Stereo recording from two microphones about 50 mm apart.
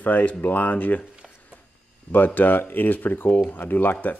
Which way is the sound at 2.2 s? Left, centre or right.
Left.